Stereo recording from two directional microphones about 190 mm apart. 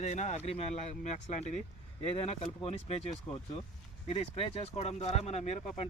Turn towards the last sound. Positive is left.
turn(degrees=35)  # may be behind; listen again after turning